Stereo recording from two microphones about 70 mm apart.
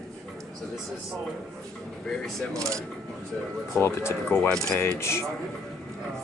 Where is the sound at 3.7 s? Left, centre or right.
Left.